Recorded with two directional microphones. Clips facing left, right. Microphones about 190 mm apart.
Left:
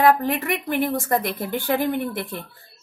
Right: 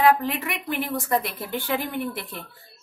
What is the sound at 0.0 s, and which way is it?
A woman's voice, 45° left (ahead or behind).